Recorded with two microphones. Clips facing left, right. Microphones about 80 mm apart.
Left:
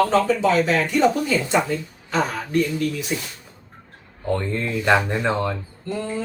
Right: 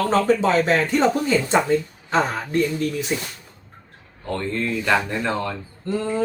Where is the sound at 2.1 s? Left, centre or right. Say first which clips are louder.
Right 2 dB; right.